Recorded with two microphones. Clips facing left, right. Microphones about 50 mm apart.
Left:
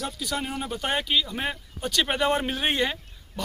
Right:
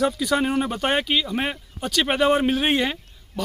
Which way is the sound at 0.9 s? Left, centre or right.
Right.